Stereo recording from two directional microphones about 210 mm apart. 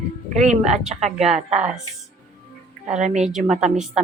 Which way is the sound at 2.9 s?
35° right (ahead or behind).